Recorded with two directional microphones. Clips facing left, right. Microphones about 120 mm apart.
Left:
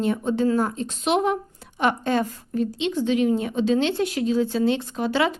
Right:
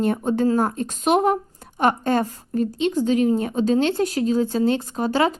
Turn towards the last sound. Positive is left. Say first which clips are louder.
# right 2 dB
turn(degrees=-40)  # may be behind; listen again after turning